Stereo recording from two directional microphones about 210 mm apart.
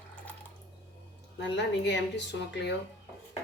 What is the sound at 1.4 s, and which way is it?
Speech, 55° left (ahead or behind).